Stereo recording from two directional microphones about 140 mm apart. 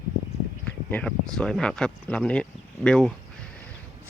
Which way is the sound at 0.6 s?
10° left (ahead or behind).